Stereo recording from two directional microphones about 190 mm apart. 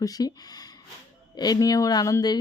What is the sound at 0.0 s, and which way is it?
Speech, 20° left (ahead or behind).